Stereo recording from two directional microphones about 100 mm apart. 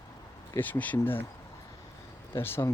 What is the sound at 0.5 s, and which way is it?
Speech, 15° left (ahead or behind).